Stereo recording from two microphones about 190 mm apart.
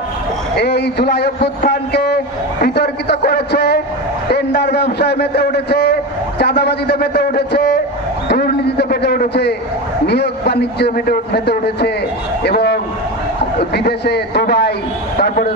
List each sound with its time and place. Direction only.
0.6 s a man's voice: 60° left (ahead or behind)